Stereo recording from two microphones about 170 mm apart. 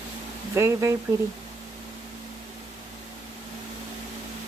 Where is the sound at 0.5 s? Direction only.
15° right (ahead or behind).